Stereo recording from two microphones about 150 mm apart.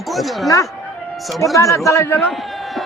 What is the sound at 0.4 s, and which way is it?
A man's voice, 20° left (ahead or behind).